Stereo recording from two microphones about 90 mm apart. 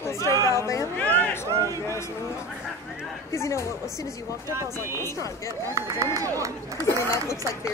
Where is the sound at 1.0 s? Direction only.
20° left (ahead or behind).